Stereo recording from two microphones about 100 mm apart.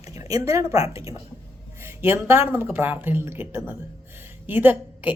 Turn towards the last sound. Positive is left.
turn(degrees=-20)  # may be behind; listen again after turning